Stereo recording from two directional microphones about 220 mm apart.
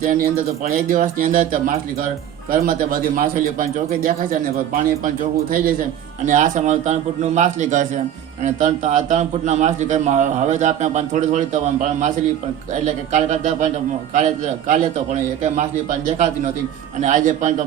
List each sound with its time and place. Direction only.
0.6 s a man's voice: 35° right (ahead or behind)